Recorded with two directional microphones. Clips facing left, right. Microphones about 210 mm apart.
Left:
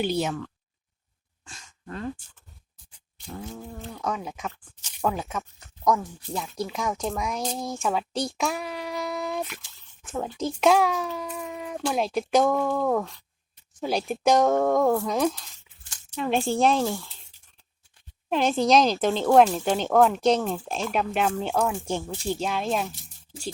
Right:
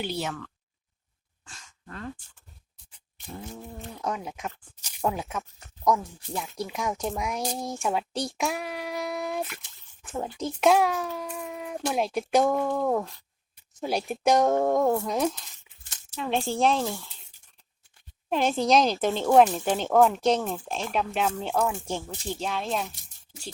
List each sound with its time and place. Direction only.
0.0 s speech: 15° left (ahead or behind)
1.5 s sigh: 20° left (ahead or behind)
3.5 s a child's voice: 15° right (ahead or behind)
16.3 s speech: 5° left (ahead or behind)
18.3 s speech: centre (ahead or behind)
22.4 s speech: 10° left (ahead or behind)